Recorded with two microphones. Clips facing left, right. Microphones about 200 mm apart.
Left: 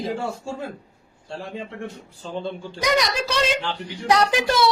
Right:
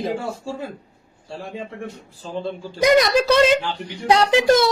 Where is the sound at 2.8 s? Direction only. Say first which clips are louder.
Right 7 dB; 55° right (ahead or behind).